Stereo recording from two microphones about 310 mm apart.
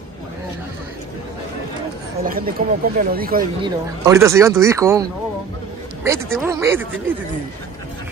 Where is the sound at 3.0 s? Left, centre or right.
Right.